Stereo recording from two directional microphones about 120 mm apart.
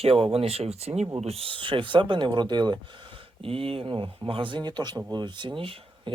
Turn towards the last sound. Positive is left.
turn(degrees=-45)  # may be behind; listen again after turning